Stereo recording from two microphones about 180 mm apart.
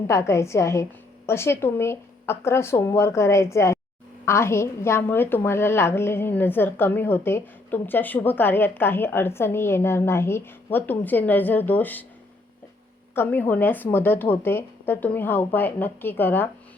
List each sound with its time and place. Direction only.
0.1 s a woman's voice: 15° left (ahead or behind)
13.1 s a woman's voice: 10° left (ahead or behind)